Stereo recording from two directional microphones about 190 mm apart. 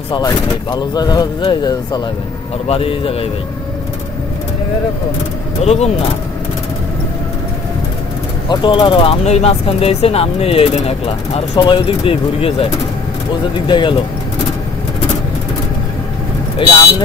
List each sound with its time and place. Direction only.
0.1 s speech: 20° left (ahead or behind)
5.6 s speech: 35° left (ahead or behind)
8.5 s speech: 25° left (ahead or behind)
13.7 s speech: 25° left (ahead or behind)